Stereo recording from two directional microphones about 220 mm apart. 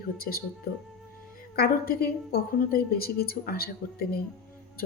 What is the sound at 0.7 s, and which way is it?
A woman's voice, 45° left (ahead or behind).